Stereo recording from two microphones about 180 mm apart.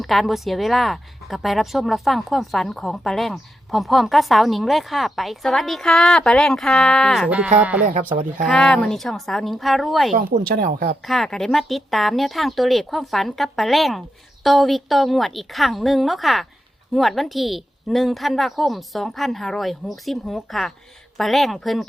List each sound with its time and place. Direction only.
0.0 s a woman's voice: centre (ahead or behind)
7.9 s speech: 50° right (ahead or behind)
8.4 s a woman's voice: 5° left (ahead or behind)
10.1 s speech: 50° right (ahead or behind)
11.0 s a woman's voice: centre (ahead or behind)